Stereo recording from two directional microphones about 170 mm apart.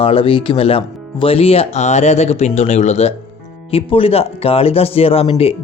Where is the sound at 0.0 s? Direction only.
35° left (ahead or behind).